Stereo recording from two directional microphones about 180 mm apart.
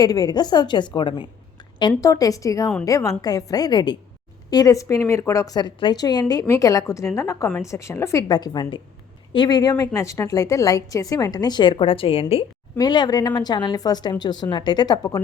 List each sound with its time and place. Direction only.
0.0 s a woman's voice: 20° left (ahead or behind)